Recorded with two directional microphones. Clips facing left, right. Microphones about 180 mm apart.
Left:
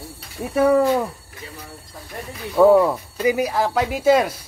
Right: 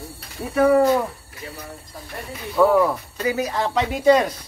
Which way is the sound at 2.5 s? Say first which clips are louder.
Left 3 dB; 25° left (ahead or behind).